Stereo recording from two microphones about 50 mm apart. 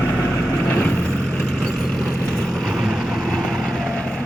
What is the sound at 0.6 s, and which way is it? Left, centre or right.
Vehicle, left.